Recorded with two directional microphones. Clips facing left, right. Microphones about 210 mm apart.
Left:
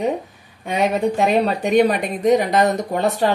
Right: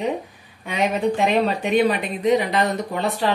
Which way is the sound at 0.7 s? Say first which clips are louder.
Left 2 dB; 40° left (ahead or behind).